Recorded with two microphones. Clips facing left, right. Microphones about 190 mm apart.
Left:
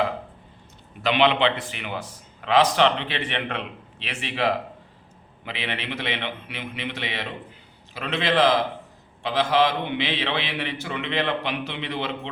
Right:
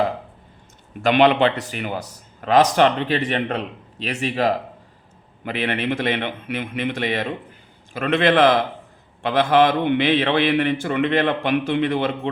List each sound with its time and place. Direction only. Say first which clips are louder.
1.0 s a man's voice: right 5 dB; 45° right (ahead or behind)